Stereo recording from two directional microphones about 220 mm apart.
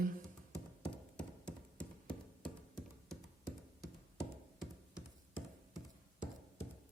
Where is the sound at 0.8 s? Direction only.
5° left (ahead or behind).